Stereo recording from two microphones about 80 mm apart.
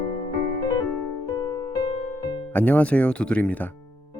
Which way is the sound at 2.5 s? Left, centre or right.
Centre.